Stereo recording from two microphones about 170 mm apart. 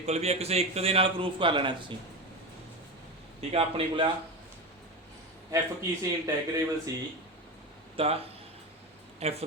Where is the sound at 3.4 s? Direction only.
35° right (ahead or behind).